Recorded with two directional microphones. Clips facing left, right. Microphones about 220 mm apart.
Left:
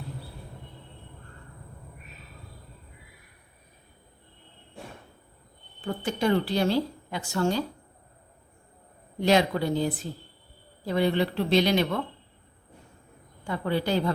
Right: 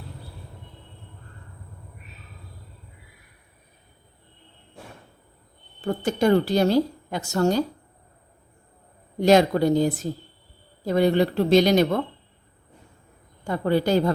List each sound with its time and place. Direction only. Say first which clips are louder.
5.8 s a woman's voice: right 5 dB; 45° right (ahead or behind)
9.2 s a woman's voice: right 6 dB; 45° right (ahead or behind)
13.4 s a woman's voice: right 6 dB; 45° right (ahead or behind)